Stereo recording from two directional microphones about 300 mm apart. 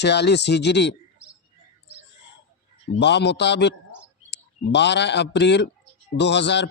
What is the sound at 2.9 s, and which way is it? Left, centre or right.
A man's voice, left.